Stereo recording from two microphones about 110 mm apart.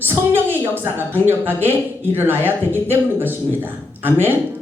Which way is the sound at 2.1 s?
20° right (ahead or behind).